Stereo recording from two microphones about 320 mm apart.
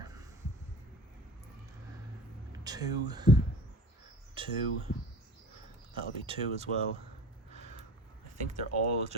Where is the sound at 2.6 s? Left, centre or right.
Centre.